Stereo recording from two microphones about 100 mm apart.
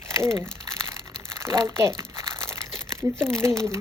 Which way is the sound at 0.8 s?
25° right (ahead or behind).